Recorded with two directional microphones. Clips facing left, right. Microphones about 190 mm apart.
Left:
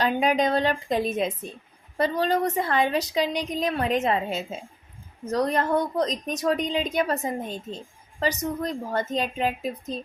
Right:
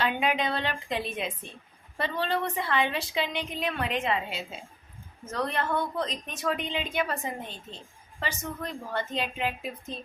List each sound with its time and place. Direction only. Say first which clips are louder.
0.0 s a woman's voice: left 5 dB; 40° left (ahead or behind)